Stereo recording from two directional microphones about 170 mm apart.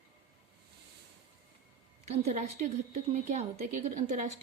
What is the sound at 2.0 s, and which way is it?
A woman's voice, 40° right (ahead or behind).